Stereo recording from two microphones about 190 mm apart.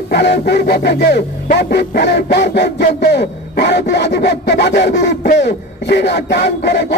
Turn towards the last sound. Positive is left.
turn(degrees=60)  # may be behind; listen again after turning